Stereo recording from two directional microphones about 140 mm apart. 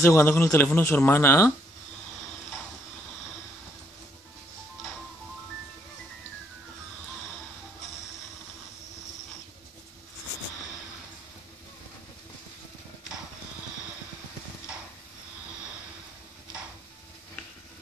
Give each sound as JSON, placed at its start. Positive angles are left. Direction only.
{"t": 0.0, "sound": "speech", "side_deg": 20}